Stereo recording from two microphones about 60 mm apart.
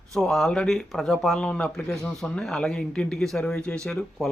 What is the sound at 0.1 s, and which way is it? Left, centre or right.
Speech, centre.